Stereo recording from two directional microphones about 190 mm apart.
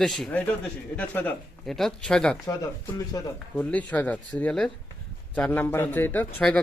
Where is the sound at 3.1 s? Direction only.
20° left (ahead or behind).